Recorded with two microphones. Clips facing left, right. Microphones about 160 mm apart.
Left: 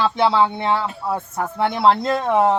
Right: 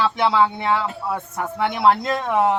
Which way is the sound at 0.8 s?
20° left (ahead or behind).